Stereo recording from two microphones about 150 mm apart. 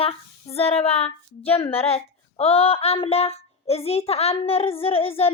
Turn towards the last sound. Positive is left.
turn(degrees=40)  # may be behind; listen again after turning